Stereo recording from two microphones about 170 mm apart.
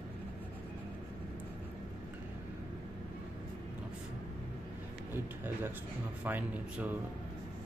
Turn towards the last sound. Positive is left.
turn(degrees=-10)  # may be behind; listen again after turning